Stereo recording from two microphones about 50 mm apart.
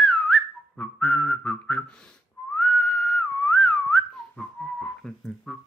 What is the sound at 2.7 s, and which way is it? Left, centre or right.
Whistling, centre.